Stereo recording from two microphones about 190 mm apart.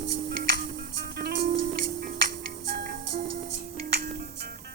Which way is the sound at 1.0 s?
60° right (ahead or behind).